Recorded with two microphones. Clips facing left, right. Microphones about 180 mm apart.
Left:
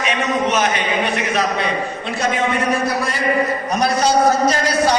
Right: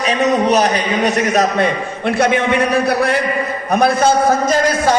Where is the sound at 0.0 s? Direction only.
35° right (ahead or behind).